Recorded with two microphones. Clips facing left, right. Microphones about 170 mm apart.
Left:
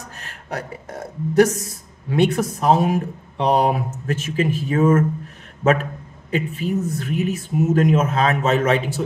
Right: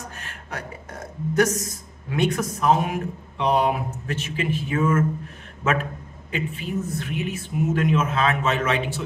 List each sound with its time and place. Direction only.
0.2 s speech: 35° left (ahead or behind)